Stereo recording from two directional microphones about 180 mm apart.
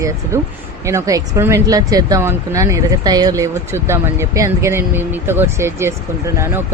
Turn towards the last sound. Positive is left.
turn(degrees=-15)  # may be behind; listen again after turning